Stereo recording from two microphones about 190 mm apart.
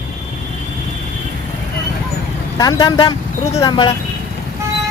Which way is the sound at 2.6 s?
20° left (ahead or behind).